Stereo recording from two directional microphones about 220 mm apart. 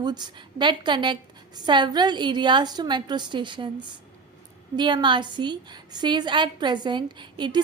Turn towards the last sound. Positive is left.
turn(degrees=-20)  # may be behind; listen again after turning